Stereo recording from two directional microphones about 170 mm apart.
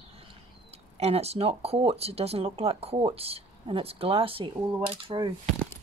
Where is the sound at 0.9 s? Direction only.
40° right (ahead or behind).